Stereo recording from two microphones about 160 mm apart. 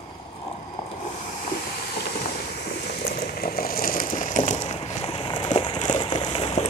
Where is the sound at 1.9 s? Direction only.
70° left (ahead or behind).